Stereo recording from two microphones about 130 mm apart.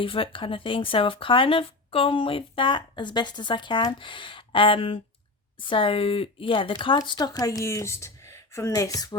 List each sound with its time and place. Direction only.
0.0 s speech: 45° left (ahead or behind); by 9.1 s 25° left (ahead or behind)